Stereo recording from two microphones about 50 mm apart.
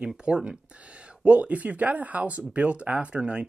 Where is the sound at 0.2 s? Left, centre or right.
Right.